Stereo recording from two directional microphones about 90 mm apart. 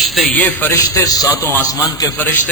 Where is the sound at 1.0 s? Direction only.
45° left (ahead or behind).